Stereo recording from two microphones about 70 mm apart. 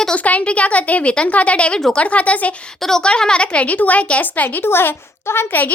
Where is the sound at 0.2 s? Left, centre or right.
Left.